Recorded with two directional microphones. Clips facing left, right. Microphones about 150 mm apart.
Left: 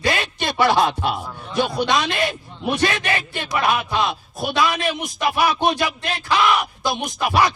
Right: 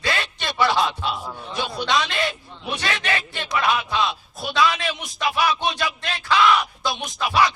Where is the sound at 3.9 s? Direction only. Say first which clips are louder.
Left 2 dB; 50° left (ahead or behind).